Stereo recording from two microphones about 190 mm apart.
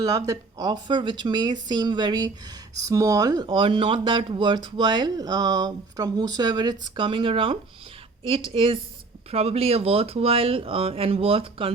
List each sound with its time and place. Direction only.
0.0 s speech: 15° right (ahead or behind)